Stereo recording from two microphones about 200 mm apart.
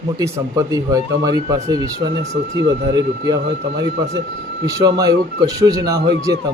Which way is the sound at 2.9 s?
20° right (ahead or behind).